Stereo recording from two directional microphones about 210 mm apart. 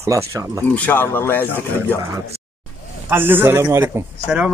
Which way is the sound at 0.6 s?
10° left (ahead or behind).